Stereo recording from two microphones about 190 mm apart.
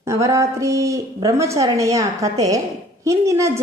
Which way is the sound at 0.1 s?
15° right (ahead or behind).